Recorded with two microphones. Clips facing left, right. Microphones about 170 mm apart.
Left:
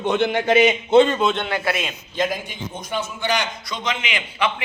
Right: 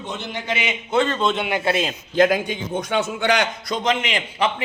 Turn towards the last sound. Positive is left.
turn(degrees=-40)  # may be behind; listen again after turning